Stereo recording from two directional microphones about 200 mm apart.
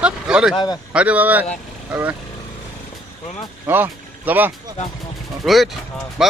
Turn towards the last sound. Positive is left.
turn(degrees=0)  # may be behind; listen again after turning